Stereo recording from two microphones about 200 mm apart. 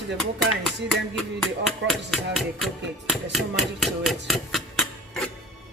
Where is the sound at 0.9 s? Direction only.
Centre (ahead or behind).